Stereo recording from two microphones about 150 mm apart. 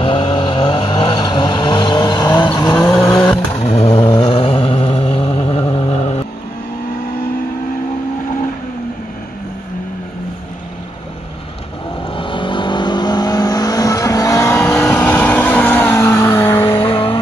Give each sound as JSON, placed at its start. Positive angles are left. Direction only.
{"t": 0.0, "sound": "vehicle", "side_deg": 35}
{"t": 3.5, "sound": "vehicle", "side_deg": 45}
{"t": 4.1, "sound": "a sound", "side_deg": 40}
{"t": 12.1, "sound": "vehicle", "side_deg": 35}
{"t": 16.8, "sound": "vehicle", "side_deg": 35}